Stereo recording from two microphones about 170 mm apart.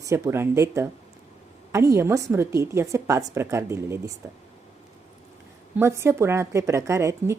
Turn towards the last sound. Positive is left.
turn(degrees=-15)  # may be behind; listen again after turning